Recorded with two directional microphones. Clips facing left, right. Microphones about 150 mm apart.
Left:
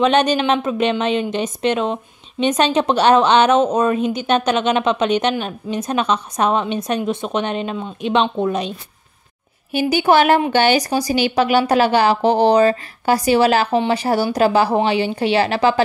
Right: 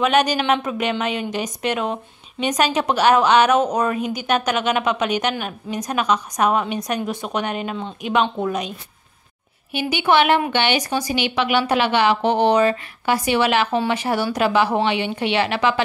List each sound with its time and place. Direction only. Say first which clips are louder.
0.0 s a woman's voice: left 3 dB; 25° left (ahead or behind)
9.7 s speech: left 4 dB; 40° left (ahead or behind)